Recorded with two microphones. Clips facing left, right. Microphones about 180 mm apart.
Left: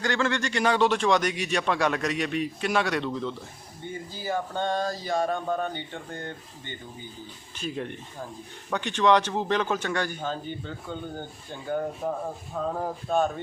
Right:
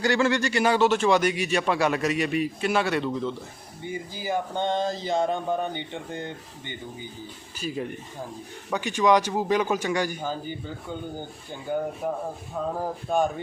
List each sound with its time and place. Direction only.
0.0 s speech: 10° right (ahead or behind)
3.8 s speech: 15° right (ahead or behind)
7.6 s speech: 5° right (ahead or behind)